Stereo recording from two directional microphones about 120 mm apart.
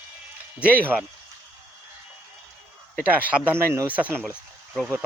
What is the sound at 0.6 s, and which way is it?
Speech, 15° right (ahead or behind).